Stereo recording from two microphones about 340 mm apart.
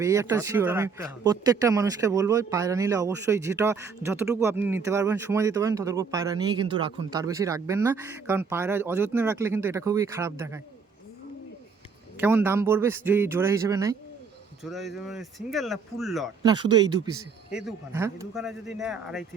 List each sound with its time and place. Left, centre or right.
0.0 s a man's voice: centre
12.2 s a man's voice: centre
16.4 s a man's voice: centre
17.5 s speech: centre